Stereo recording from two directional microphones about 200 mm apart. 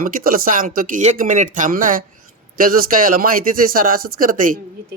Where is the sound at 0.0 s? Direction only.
45° right (ahead or behind).